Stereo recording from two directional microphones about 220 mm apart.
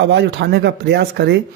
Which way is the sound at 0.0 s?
55° right (ahead or behind).